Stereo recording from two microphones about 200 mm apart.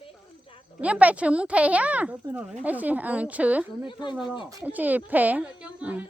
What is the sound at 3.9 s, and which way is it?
Speech, 25° left (ahead or behind).